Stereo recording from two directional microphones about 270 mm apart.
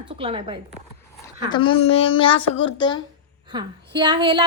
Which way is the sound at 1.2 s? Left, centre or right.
Centre.